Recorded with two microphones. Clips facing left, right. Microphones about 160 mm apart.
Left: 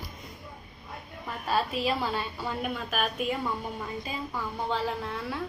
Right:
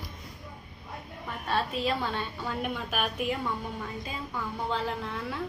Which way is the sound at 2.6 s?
10° right (ahead or behind).